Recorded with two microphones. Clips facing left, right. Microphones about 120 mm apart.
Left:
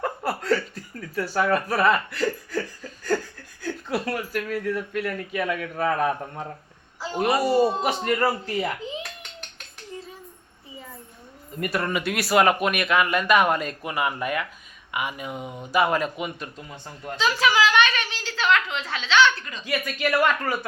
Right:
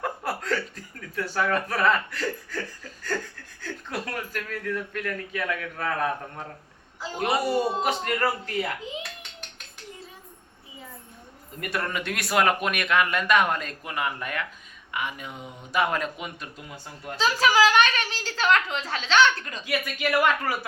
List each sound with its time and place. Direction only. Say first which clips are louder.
0.0 s chuckle: left 3 dB; centre (ahead or behind)
3.6 s speech: left 6 dB; 5° left (ahead or behind)
7.5 s speech: left 4 dB; centre (ahead or behind)
11.6 s speech: left 4 dB; 5° left (ahead or behind)
17.2 s a woman's voice: right 1 dB; 40° right (ahead or behind)
19.6 s speech: left 2 dB; 5° right (ahead or behind)